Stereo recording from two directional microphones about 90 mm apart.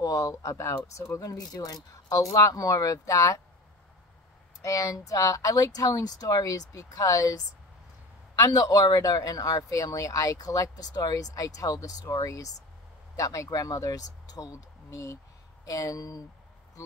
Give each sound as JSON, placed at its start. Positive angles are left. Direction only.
{"t": 0.0, "sound": "speech", "side_deg": 40}
{"t": 4.6, "sound": "speech", "side_deg": 40}